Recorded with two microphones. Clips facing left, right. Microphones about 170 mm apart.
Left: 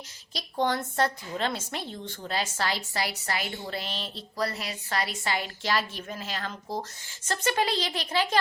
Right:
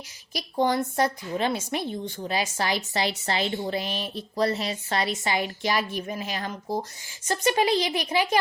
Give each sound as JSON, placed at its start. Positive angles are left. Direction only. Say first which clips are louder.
{"t": 0.3, "sound": "a woman's voice", "louder": "right 4 dB", "side_deg": -10}
{"t": 4.4, "sound": "a woman's voice", "louder": "right 6 dB", "side_deg": -25}